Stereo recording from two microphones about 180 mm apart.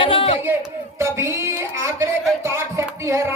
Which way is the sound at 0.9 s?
15° right (ahead or behind).